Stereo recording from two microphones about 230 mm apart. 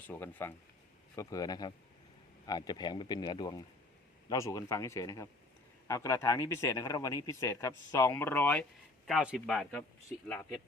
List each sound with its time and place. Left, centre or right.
0.1 s speech: centre